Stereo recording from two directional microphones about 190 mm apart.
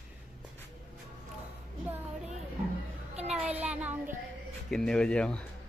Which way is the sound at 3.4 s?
10° right (ahead or behind).